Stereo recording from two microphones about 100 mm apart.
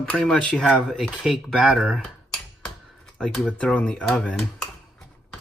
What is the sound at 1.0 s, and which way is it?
Speech, 5° right (ahead or behind).